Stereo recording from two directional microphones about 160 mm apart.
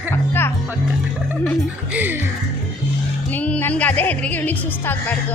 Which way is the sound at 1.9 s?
10° right (ahead or behind).